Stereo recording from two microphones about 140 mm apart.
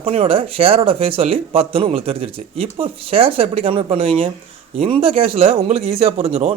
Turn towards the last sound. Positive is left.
turn(degrees=-45)  # may be behind; listen again after turning